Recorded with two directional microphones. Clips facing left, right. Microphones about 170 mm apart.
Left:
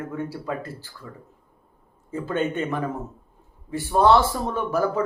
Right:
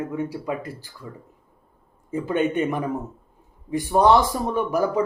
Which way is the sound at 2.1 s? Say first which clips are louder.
Right 3 dB; 15° right (ahead or behind).